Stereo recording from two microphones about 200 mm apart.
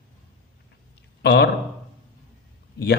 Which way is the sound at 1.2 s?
55° left (ahead or behind).